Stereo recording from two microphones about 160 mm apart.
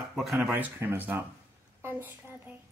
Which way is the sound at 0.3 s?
10° right (ahead or behind).